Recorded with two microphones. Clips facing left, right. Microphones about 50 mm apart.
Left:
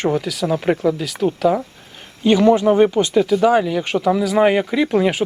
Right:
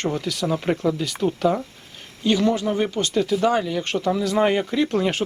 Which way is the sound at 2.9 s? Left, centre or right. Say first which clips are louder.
Left 6 dB; centre.